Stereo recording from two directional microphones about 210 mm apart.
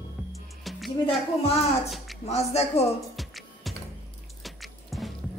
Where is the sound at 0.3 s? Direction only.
Centre (ahead or behind).